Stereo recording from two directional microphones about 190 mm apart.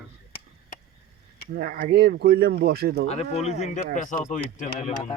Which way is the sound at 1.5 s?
50° right (ahead or behind).